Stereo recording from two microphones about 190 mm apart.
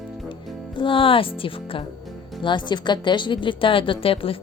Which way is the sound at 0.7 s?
25° left (ahead or behind).